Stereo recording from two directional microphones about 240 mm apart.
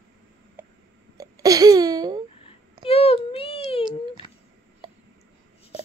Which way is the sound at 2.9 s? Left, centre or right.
Left.